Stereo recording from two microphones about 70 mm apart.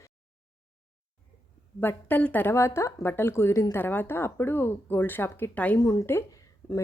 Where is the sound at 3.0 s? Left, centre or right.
Left.